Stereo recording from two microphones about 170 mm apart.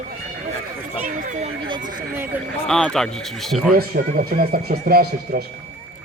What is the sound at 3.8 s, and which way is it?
Speech, 65° right (ahead or behind).